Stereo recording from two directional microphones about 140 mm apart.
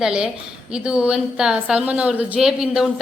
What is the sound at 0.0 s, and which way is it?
A woman's voice, 5° right (ahead or behind).